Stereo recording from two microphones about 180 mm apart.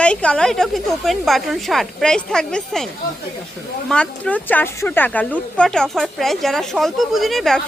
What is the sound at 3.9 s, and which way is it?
Speech, 5° left (ahead or behind).